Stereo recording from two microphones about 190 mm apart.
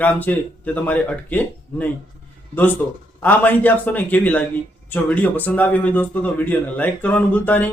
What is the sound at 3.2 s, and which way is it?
Speech, 10° left (ahead or behind).